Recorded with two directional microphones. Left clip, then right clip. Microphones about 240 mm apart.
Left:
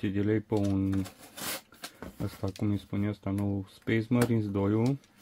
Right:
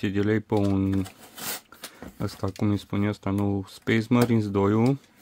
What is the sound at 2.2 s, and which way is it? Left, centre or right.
Speech, right.